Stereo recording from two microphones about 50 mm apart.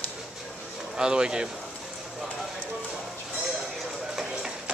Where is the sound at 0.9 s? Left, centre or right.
Centre.